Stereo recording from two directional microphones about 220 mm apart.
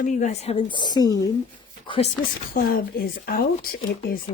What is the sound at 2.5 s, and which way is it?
Speech, 40° left (ahead or behind).